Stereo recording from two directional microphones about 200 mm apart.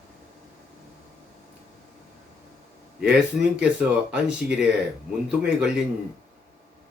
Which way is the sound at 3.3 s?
5° right (ahead or behind).